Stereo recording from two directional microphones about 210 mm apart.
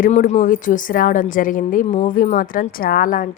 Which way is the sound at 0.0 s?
35° left (ahead or behind).